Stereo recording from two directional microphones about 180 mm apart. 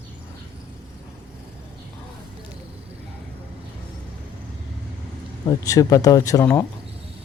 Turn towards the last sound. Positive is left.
turn(degrees=15)  # may be behind; listen again after turning